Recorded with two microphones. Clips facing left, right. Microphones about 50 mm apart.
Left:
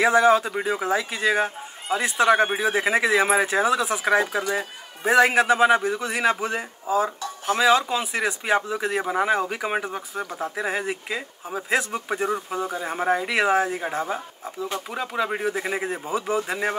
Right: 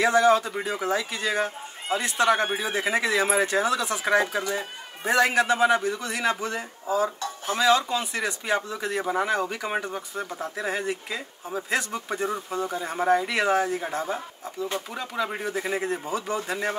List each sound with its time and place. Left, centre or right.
0.0 s speech: centre